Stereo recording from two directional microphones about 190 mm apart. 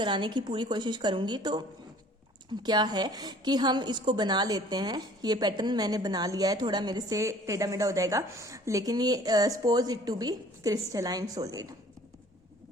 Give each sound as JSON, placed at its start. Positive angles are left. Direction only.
{"t": 0.0, "sound": "a woman's voice", "side_deg": -25}
{"t": 2.6, "sound": "a woman's voice", "side_deg": -20}